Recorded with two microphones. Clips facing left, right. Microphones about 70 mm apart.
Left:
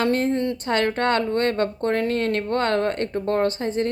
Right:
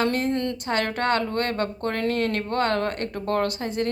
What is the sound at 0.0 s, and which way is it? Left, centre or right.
Speech, left.